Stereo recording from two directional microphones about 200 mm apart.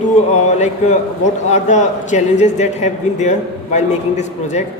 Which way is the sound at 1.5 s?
35° left (ahead or behind).